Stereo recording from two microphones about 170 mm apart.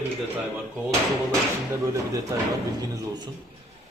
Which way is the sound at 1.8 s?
20° right (ahead or behind).